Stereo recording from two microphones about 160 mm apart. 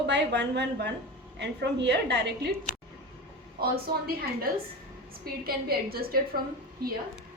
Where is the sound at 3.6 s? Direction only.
70° right (ahead or behind).